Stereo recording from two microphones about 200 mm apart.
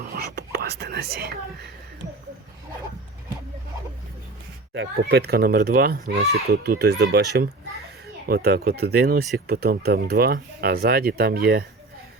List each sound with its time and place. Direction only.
0.1 s speech: 55° right (ahead or behind)
4.7 s a child's voice: 60° right (ahead or behind)